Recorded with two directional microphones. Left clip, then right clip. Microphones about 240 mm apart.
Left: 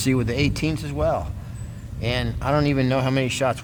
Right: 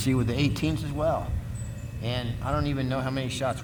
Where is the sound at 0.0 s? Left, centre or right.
Left.